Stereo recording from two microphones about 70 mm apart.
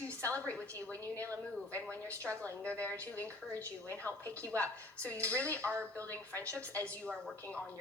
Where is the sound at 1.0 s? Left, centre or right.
Left.